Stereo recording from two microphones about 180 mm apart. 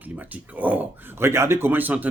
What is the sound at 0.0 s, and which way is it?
Speech, 10° right (ahead or behind).